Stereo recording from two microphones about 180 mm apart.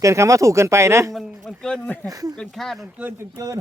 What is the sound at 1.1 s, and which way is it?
Speech, centre (ahead or behind).